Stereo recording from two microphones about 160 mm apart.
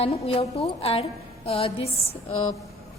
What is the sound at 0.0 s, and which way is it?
A woman's voice, 35° left (ahead or behind).